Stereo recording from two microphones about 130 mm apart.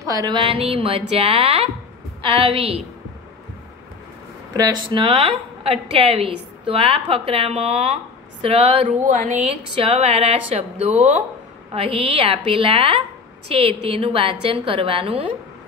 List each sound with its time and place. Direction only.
0.0 s a woman's voice: 30° right (ahead or behind); by 2.8 s 45° right (ahead or behind)
4.6 s a woman's voice: 35° right (ahead or behind)
8.8 s speech: 85° right
9.4 s a woman's voice: 50° right (ahead or behind)